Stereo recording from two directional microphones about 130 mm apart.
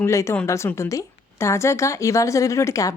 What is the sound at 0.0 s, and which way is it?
A woman's voice, 20° left (ahead or behind).